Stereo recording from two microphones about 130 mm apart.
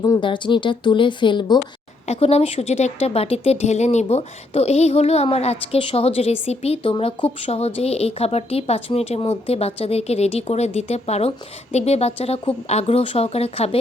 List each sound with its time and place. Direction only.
0.0 s speech: 35° left (ahead or behind)
2.0 s a woman's voice: 50° left (ahead or behind)